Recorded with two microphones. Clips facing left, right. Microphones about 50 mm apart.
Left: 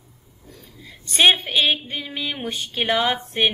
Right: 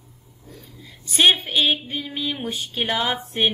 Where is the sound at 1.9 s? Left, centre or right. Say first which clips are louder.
Right 1 dB; centre.